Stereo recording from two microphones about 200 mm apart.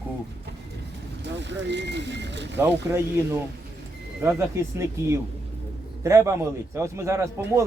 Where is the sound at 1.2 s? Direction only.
60° right (ahead or behind).